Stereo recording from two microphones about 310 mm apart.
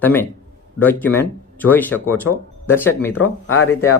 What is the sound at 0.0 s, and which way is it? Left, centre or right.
Speech, centre.